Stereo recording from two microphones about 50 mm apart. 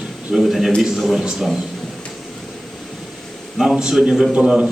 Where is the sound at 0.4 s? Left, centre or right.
Centre.